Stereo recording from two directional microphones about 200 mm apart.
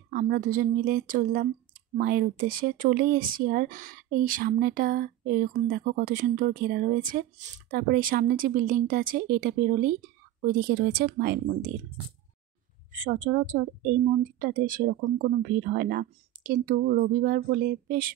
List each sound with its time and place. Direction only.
0.1 s speech: 45° right (ahead or behind)
12.9 s speech: 40° right (ahead or behind)